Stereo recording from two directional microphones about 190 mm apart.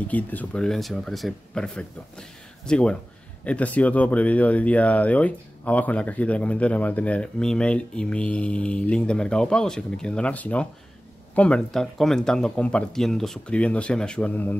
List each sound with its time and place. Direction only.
0.1 s speech: 10° left (ahead or behind)